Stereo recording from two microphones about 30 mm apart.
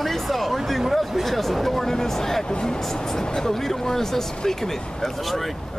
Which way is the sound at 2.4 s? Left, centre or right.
Left.